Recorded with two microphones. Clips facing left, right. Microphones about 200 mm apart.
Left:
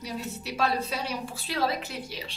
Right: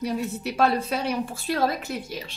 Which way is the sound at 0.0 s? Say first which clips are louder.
Right 8 dB; 55° right (ahead or behind).